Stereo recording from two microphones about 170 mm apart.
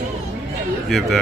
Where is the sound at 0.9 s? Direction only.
Centre (ahead or behind).